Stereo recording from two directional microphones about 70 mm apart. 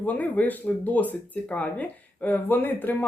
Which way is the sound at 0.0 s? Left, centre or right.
Left.